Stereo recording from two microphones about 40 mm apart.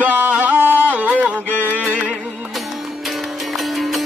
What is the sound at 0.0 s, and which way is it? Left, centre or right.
Music, right.